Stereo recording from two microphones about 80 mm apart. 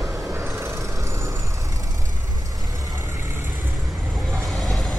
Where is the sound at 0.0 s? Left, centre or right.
Centre.